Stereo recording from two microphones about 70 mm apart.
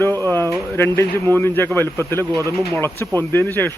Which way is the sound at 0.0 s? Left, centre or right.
Left.